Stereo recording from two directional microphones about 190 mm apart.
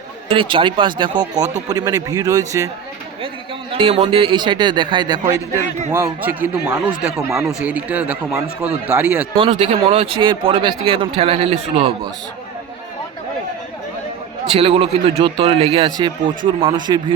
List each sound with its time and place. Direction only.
0.3 s speech: 25° right (ahead or behind)
3.8 s a man's voice: 35° right (ahead or behind); by 9.2 s 10° right (ahead or behind)
9.3 s speech: 30° right (ahead or behind)
14.5 s speech: 30° right (ahead or behind)